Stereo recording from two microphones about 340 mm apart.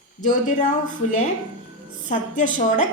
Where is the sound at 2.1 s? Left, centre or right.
Left.